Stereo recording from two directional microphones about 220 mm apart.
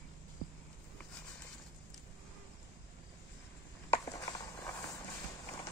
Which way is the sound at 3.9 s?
15° left (ahead or behind).